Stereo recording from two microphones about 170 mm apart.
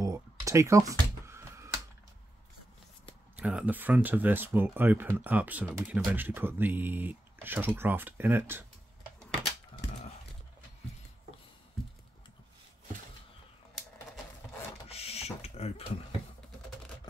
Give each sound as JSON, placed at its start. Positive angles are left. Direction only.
{"t": 0.0, "sound": "computer keyboard", "side_deg": -20}
{"t": 3.3, "sound": "speech", "side_deg": -5}
{"t": 14.9, "sound": "a sound", "side_deg": 35}